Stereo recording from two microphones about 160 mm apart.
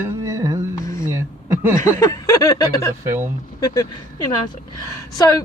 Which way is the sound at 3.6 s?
25° left (ahead or behind).